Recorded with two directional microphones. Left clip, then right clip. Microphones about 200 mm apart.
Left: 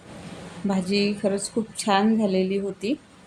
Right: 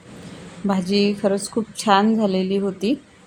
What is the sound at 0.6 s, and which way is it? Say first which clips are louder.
A woman's voice: right 4 dB; 20° right (ahead or behind).